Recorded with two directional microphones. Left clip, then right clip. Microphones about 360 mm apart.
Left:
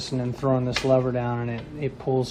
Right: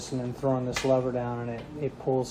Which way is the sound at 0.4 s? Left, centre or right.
Left.